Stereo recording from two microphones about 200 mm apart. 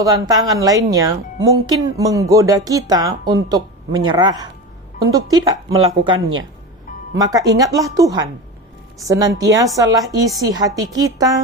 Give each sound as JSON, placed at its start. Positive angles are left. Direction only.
{"t": 0.0, "sound": "speech", "side_deg": -15}
{"t": 7.2, "sound": "speech", "side_deg": -20}